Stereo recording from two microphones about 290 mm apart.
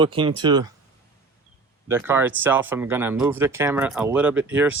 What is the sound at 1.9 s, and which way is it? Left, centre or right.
Speech, centre.